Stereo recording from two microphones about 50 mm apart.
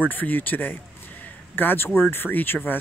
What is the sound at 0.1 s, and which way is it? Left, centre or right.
Speech, left.